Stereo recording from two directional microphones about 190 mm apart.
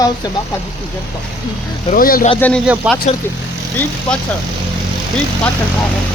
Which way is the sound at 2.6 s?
5° right (ahead or behind).